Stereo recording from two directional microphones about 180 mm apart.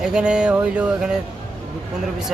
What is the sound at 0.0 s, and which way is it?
Speech, 5° right (ahead or behind).